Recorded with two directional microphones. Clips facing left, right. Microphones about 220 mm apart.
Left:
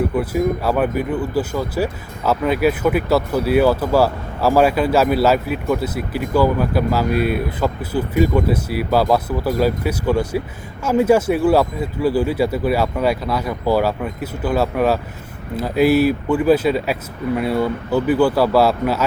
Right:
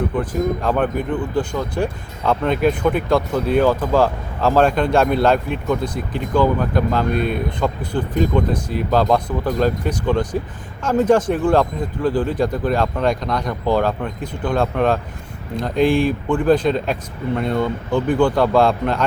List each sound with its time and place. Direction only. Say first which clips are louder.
0.2 s speech: left 2 dB; 10° left (ahead or behind)